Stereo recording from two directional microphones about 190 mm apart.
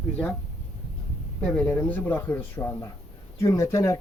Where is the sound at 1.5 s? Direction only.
10° left (ahead or behind).